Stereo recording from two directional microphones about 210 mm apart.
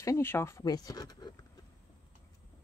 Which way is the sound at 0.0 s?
10° left (ahead or behind).